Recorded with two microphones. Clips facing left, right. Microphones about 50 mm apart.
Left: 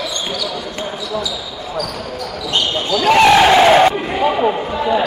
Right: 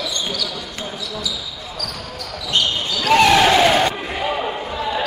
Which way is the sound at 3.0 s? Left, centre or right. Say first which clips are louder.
Left 3 dB; centre.